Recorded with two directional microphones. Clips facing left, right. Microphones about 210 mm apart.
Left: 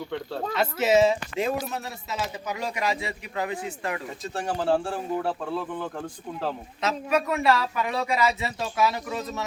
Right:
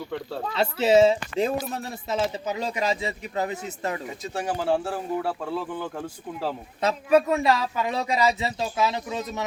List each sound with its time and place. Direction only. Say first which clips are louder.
0.5 s speech: right 2 dB; 30° right (ahead or behind)
4.2 s speech: even; centre (ahead or behind)
6.8 s speech: right 5 dB; 30° right (ahead or behind)